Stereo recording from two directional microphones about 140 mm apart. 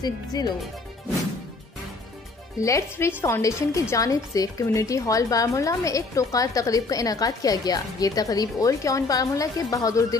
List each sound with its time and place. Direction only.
0.0 s a woman's voice: 30° left (ahead or behind)
2.6 s a woman's voice: 20° left (ahead or behind)